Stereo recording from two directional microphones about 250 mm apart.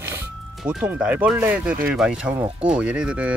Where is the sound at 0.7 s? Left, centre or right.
Centre.